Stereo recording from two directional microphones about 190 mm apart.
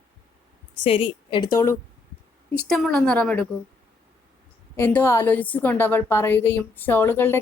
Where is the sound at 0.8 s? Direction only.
30° left (ahead or behind).